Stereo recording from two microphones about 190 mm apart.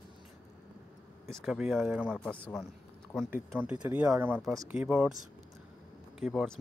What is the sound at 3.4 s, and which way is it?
Speech, 5° right (ahead or behind).